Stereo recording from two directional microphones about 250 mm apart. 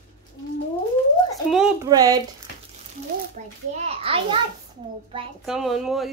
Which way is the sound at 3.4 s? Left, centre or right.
Right.